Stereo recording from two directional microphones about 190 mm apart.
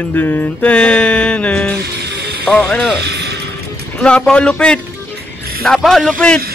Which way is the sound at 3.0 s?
60° right (ahead or behind).